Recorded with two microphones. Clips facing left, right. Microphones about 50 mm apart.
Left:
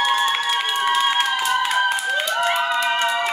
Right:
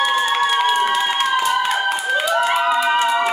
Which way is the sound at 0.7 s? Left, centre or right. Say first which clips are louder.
Right 2 dB; centre.